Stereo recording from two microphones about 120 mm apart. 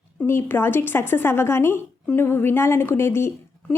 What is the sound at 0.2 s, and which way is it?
A woman's voice, 20° left (ahead or behind).